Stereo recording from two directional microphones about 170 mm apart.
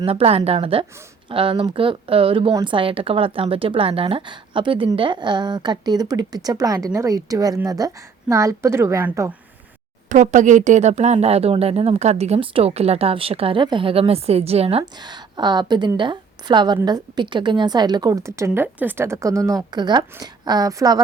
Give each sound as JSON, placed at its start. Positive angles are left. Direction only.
{"t": 0.0, "sound": "a woman's voice", "side_deg": -35}
{"t": 10.1, "sound": "speech", "side_deg": -45}